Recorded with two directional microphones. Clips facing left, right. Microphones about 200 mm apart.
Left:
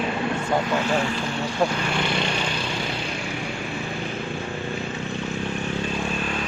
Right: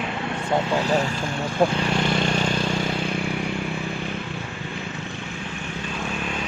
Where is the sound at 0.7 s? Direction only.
35° right (ahead or behind).